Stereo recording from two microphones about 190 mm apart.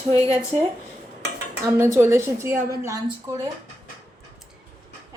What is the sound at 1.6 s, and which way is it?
A woman's voice, 15° right (ahead or behind).